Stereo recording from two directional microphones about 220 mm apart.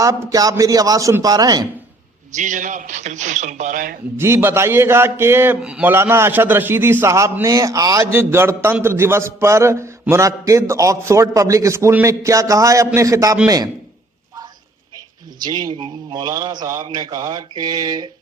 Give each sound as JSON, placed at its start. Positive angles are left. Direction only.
{"t": 0.0, "sound": "a man's voice", "side_deg": -15}
{"t": 2.3, "sound": "a man's voice", "side_deg": -35}
{"t": 4.2, "sound": "a man's voice", "side_deg": -10}
{"t": 15.4, "sound": "a man's voice", "side_deg": -20}